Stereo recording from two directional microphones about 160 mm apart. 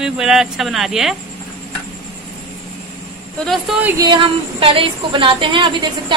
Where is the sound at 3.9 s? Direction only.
30° right (ahead or behind).